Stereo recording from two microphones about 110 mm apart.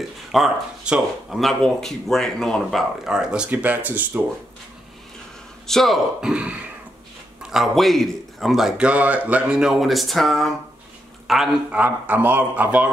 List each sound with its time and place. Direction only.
0.3 s speech: 5° right (ahead or behind)
5.7 s speech: centre (ahead or behind)
6.3 s a man's voice: 10° right (ahead or behind)
11.8 s a man's voice: 15° right (ahead or behind)